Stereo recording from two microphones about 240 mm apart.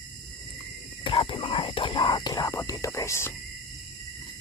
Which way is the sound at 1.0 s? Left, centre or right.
Left.